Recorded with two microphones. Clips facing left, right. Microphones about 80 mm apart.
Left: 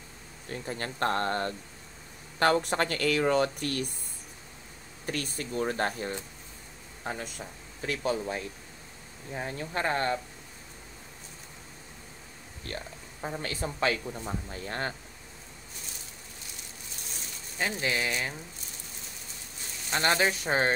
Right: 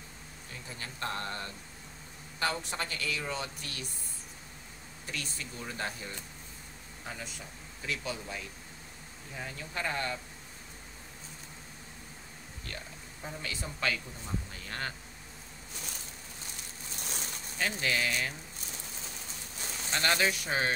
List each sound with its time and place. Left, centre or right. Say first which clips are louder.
0.5 s speech: left 10 dB; left
5.0 s speech: left 7 dB; left
12.7 s speech: left 6 dB; left
17.6 s speech: left 2 dB; left
19.9 s speech: left 3 dB; left